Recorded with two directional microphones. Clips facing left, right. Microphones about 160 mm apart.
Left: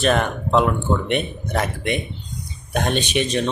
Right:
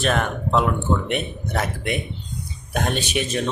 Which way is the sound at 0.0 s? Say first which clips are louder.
Left 3 dB; centre (ahead or behind).